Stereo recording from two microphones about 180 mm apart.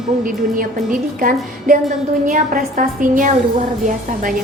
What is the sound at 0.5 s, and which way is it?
A woman's voice, 50° right (ahead or behind).